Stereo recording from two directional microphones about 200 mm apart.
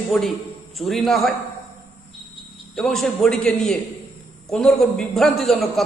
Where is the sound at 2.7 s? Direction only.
Centre (ahead or behind).